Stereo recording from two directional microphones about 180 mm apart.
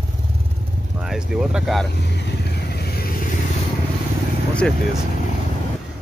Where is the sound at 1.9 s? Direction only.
65° left (ahead or behind).